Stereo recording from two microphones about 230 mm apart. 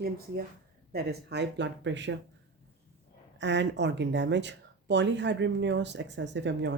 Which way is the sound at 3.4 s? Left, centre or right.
Right.